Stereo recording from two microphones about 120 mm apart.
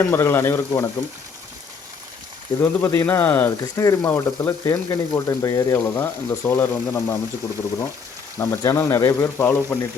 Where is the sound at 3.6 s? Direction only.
25° left (ahead or behind).